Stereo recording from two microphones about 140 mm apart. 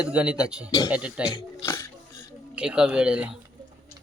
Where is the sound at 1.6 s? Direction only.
20° left (ahead or behind).